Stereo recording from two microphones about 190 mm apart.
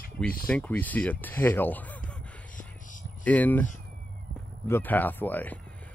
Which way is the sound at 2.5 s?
45° left (ahead or behind).